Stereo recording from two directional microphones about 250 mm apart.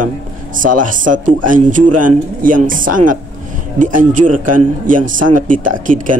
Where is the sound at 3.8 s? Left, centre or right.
Right.